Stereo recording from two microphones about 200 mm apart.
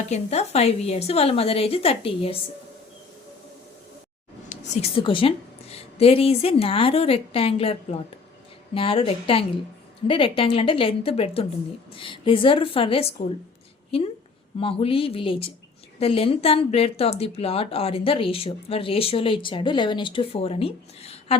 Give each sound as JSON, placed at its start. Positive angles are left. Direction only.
{"t": 0.1, "sound": "speech", "side_deg": 30}
{"t": 4.4, "sound": "a woman's voice", "side_deg": 30}
{"t": 14.6, "sound": "speech", "side_deg": 30}